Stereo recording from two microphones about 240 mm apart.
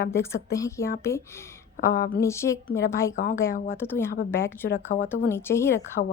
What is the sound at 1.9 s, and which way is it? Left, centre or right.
Speech, left.